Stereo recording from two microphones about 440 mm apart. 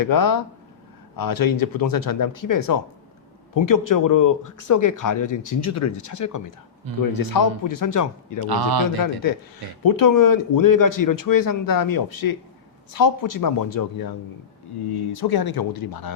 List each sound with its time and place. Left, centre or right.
0.0 s speech: left
8.4 s speech: right
9.8 s speech: left